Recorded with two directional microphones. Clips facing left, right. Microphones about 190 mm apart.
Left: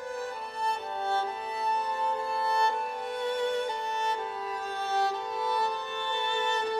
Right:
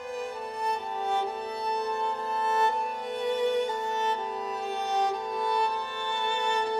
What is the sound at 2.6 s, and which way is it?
Music, 20° right (ahead or behind).